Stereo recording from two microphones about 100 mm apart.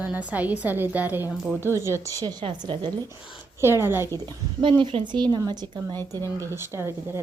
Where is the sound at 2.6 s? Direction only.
50° right (ahead or behind).